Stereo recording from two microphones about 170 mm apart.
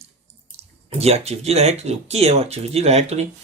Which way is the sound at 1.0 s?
40° right (ahead or behind).